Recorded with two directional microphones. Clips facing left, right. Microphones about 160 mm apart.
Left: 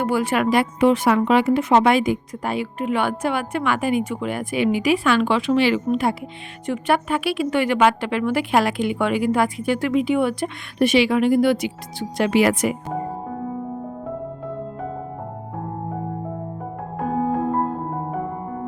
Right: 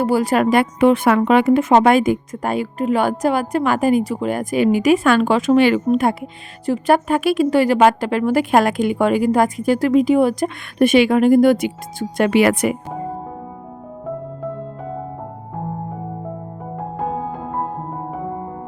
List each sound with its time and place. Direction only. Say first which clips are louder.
0.0 s speech: right 4 dB; 35° right (ahead or behind)
0.6 s speech: right 3 dB; 55° right (ahead or behind)